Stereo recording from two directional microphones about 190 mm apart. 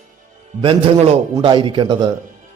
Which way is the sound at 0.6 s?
30° right (ahead or behind).